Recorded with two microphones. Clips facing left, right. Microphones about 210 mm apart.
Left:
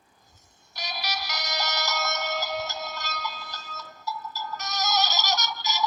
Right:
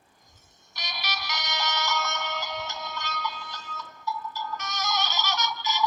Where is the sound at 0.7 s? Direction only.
35° left (ahead or behind).